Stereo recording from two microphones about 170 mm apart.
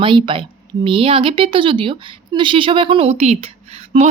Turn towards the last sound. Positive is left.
turn(degrees=-35)  # may be behind; listen again after turning